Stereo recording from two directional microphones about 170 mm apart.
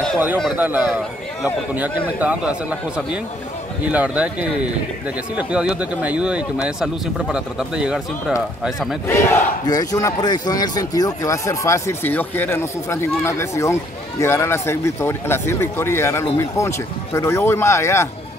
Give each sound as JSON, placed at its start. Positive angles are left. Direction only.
{"t": 0.6, "sound": "speech", "side_deg": -10}
{"t": 9.0, "sound": "speech", "side_deg": 15}